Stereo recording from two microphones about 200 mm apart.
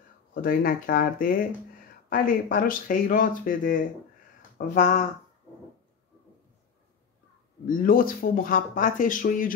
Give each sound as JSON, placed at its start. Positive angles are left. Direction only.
{"t": 0.3, "sound": "speech", "side_deg": 45}
{"t": 7.6, "sound": "speech", "side_deg": 45}